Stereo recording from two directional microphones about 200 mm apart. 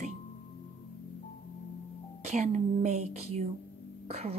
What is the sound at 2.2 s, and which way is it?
A woman's voice, 35° right (ahead or behind).